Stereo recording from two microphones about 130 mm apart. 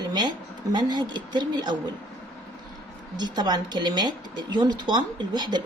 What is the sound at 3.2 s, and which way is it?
A woman's voice, 35° right (ahead or behind).